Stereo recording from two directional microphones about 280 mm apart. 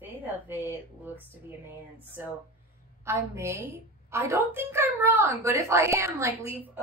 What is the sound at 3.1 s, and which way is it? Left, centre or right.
A woman's voice, centre.